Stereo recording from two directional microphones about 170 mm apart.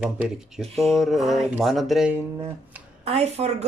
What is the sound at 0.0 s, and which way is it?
Speech, 5° right (ahead or behind).